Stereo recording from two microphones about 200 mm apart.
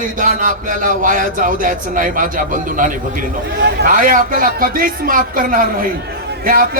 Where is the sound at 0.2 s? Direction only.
40° right (ahead or behind).